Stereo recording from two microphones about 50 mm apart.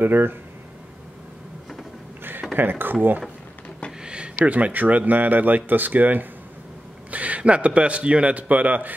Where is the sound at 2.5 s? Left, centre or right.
Right.